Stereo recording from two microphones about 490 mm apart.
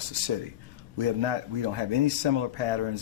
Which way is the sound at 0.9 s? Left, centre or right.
Right.